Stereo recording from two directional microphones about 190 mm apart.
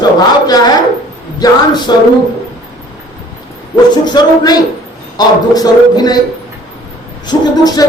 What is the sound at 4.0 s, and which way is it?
Speech, 20° left (ahead or behind).